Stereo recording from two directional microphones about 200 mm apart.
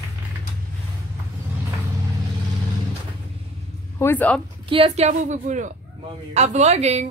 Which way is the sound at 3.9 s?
10° left (ahead or behind).